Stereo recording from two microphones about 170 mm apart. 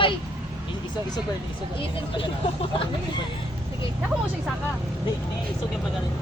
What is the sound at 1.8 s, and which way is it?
Speech, 30° left (ahead or behind).